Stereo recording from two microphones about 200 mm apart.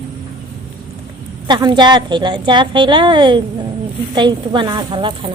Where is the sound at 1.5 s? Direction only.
20° right (ahead or behind).